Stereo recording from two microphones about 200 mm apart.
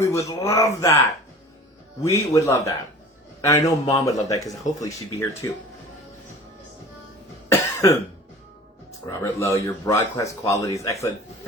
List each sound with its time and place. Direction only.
0.0 s a man's voice: 15° left (ahead or behind)
2.0 s a man's voice: 15° left (ahead or behind)
7.5 s cough: 15° left (ahead or behind)
9.0 s a man's voice: 15° left (ahead or behind)